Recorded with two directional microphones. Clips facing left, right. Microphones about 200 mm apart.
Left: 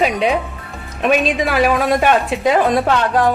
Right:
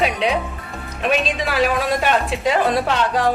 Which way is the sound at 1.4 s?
50° left (ahead or behind).